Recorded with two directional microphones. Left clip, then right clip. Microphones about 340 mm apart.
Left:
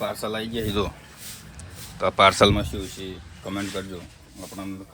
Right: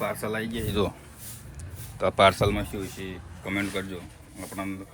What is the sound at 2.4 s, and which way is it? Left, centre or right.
Speech, centre.